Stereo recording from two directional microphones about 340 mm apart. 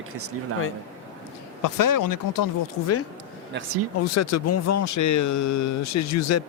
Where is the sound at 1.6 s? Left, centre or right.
Left.